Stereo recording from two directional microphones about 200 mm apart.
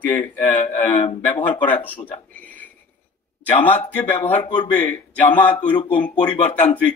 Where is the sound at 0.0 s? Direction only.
10° left (ahead or behind).